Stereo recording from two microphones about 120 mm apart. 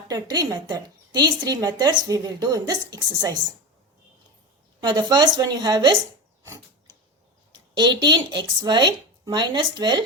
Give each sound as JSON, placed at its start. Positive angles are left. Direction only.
{"t": 0.1, "sound": "a woman's voice", "side_deg": -35}
{"t": 4.8, "sound": "a woman's voice", "side_deg": -40}
{"t": 7.8, "sound": "a woman's voice", "side_deg": -35}